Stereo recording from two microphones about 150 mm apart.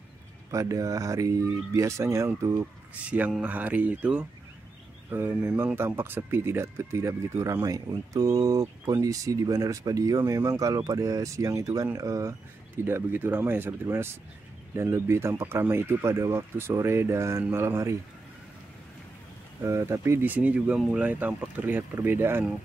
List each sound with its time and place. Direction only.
0.5 s speech: 20° right (ahead or behind)
3.1 s speech: 10° right (ahead or behind)
19.6 s speech: 20° right (ahead or behind)